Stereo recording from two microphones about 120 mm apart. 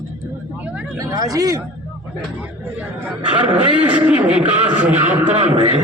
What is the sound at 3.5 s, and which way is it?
Speech, 10° right (ahead or behind).